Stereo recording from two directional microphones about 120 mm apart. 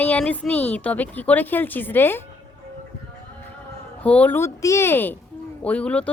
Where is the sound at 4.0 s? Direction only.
10° left (ahead or behind).